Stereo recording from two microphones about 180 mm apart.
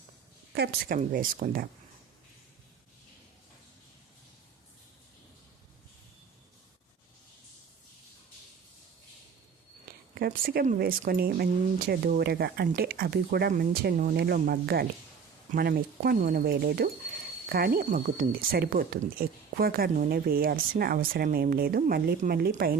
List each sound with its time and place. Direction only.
0.5 s speech: 60° right (ahead or behind)
0.9 s speech: 45° right (ahead or behind)
10.2 s speech: 60° right (ahead or behind)